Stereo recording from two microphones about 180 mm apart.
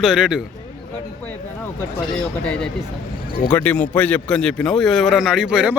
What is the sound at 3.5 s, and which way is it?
A man's voice, 10° left (ahead or behind).